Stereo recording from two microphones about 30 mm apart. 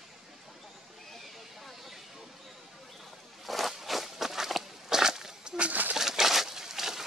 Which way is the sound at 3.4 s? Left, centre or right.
Centre.